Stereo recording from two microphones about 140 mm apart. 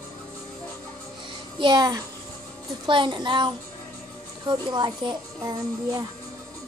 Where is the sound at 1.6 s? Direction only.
25° right (ahead or behind).